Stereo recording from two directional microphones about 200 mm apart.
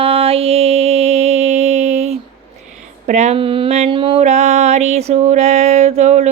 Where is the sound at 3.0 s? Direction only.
35° right (ahead or behind).